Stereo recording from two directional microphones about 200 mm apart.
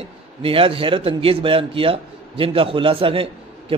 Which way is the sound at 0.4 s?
25° right (ahead or behind).